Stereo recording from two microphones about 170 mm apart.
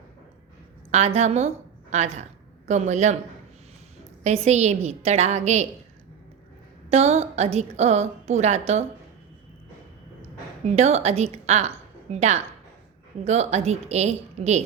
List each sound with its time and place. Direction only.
0.9 s a woman's voice: 40° right (ahead or behind)
4.2 s a woman's voice: 40° right (ahead or behind)
6.9 s a woman's voice: 40° right (ahead or behind)
10.7 s a woman's voice: 40° right (ahead or behind)